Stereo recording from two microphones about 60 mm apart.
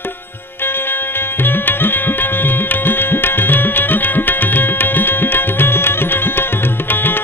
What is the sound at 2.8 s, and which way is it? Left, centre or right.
Music, left.